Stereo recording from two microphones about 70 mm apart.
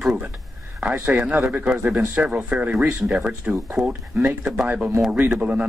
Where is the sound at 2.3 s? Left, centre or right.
Right.